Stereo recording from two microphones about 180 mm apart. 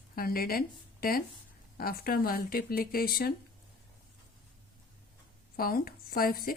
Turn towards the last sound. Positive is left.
turn(degrees=55)  # may be behind; listen again after turning